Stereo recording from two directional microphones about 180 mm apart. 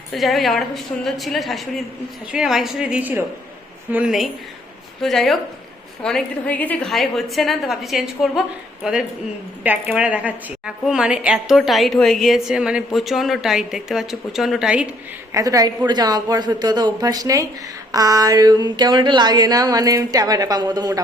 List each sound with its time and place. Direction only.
0.1 s a woman's voice: centre (ahead or behind)
15.3 s speech: 20° right (ahead or behind)